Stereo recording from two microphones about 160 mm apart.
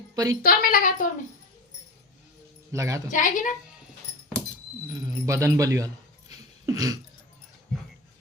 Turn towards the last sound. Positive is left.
turn(degrees=-25)  # may be behind; listen again after turning